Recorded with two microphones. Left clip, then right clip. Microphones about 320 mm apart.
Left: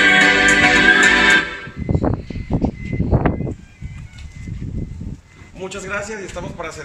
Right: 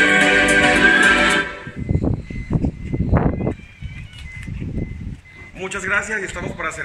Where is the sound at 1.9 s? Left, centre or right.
Left.